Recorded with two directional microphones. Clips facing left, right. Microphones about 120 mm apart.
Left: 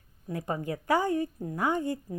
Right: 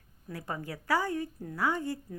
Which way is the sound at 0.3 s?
20° left (ahead or behind).